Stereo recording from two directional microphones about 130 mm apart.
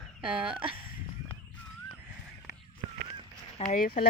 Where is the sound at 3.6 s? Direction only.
50° left (ahead or behind).